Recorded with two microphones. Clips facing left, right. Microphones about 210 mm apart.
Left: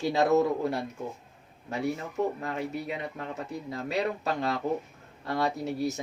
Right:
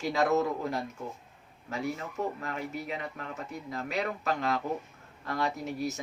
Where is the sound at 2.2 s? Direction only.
25° left (ahead or behind).